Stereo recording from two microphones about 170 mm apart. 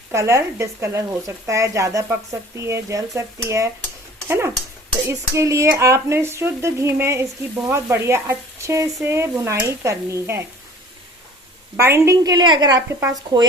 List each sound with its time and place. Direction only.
0.1 s speech: 15° right (ahead or behind)
11.8 s a woman's voice: 15° right (ahead or behind)